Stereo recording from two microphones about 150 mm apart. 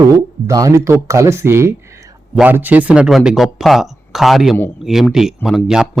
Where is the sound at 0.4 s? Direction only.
20° right (ahead or behind).